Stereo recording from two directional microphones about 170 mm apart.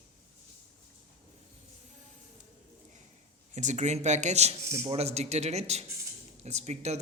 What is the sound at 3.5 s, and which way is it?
Speech, 45° right (ahead or behind).